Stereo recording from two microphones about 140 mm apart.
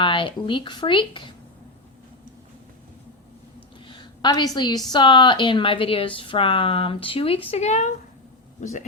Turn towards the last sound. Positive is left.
turn(degrees=55)  # may be behind; listen again after turning